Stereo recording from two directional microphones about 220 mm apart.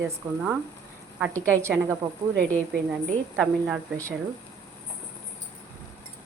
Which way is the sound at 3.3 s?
Centre (ahead or behind).